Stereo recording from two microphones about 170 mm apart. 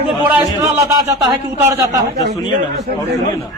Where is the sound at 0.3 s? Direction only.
15° right (ahead or behind).